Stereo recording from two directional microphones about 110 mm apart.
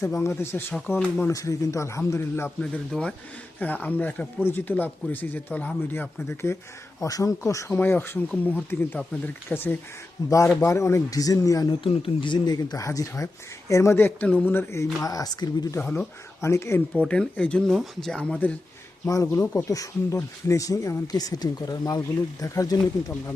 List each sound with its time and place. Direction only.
0.0 s speech: 25° left (ahead or behind)
2.6 s speech: 10° left (ahead or behind)
10.2 s speech: 30° left (ahead or behind)
11.7 s speech: 55° left (ahead or behind); by 14.8 s 20° left (ahead or behind)
15.0 s speech: 35° left (ahead or behind)
15.8 s speech: 15° left (ahead or behind)
16.4 s speech: 25° left (ahead or behind)
16.9 s speech: 10° left (ahead or behind)
19.0 s speech: 30° left (ahead or behind)